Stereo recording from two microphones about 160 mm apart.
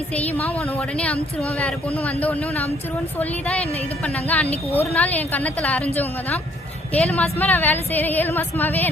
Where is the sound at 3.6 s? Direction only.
40° left (ahead or behind).